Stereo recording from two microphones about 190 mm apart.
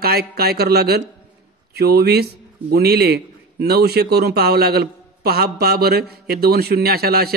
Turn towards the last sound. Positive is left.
turn(degrees=-55)  # may be behind; listen again after turning